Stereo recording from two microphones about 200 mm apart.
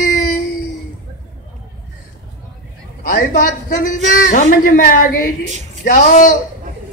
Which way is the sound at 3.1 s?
45° left (ahead or behind).